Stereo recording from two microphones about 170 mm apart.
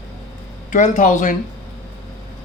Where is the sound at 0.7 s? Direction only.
50° left (ahead or behind).